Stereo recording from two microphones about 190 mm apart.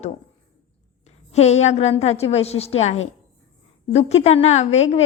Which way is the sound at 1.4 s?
35° left (ahead or behind).